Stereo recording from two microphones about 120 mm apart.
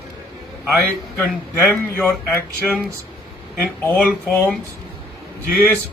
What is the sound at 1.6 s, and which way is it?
Speech, 15° left (ahead or behind).